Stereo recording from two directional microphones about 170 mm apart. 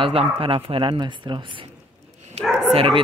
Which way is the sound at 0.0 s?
35° right (ahead or behind).